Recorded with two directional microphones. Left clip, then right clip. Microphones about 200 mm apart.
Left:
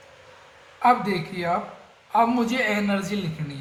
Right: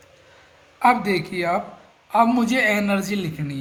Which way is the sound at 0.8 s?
55° right (ahead or behind).